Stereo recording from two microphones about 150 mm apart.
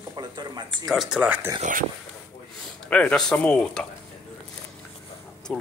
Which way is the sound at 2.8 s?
10° left (ahead or behind).